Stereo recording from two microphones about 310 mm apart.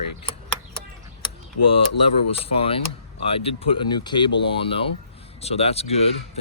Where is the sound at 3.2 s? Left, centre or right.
Centre.